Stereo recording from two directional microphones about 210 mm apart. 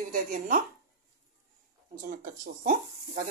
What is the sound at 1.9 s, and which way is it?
Speech, 40° right (ahead or behind).